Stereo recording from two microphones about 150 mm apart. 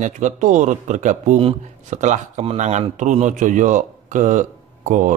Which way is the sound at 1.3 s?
40° right (ahead or behind).